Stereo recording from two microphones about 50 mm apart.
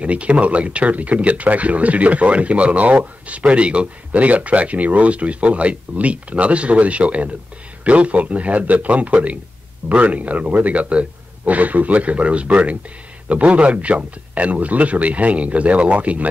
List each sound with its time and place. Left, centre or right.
0.0 s speech: right